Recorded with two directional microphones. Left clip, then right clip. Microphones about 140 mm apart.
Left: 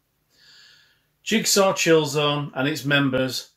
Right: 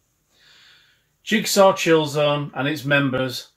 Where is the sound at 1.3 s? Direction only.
15° left (ahead or behind).